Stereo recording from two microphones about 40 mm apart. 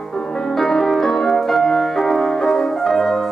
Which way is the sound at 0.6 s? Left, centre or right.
Centre.